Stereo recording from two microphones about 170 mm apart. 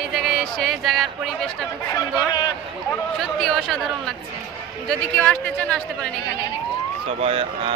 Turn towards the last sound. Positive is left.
turn(degrees=-35)  # may be behind; listen again after turning